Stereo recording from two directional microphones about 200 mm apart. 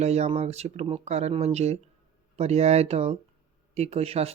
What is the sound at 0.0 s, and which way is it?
Speech, 30° right (ahead or behind).